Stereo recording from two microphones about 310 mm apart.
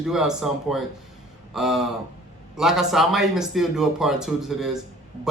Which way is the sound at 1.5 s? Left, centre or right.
Centre.